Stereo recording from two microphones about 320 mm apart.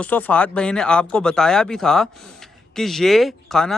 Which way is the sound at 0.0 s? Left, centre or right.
Centre.